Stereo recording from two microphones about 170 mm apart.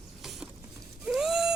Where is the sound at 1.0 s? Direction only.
5° right (ahead or behind).